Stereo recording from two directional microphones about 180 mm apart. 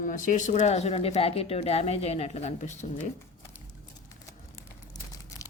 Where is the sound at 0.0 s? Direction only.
45° left (ahead or behind).